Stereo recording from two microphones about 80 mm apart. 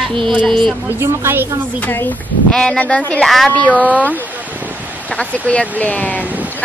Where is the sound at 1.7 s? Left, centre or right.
Left.